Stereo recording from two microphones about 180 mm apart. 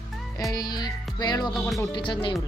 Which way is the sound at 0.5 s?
20° left (ahead or behind).